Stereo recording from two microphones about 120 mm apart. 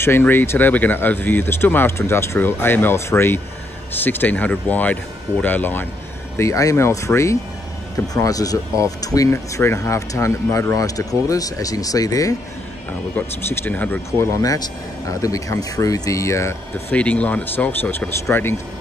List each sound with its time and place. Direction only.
0.0 s speech: 20° left (ahead or behind)
13.1 s speech: 15° left (ahead or behind)
14.3 s speech: 30° left (ahead or behind)
16.9 s speech: 10° left (ahead or behind)